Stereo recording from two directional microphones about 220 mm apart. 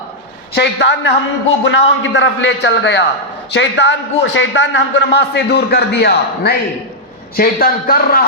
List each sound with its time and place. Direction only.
0.5 s a man's voice: 50° left (ahead or behind)